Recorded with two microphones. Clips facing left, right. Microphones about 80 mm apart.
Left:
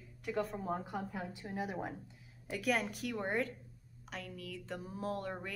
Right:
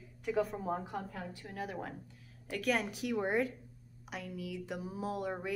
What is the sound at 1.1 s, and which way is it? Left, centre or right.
Speech, centre.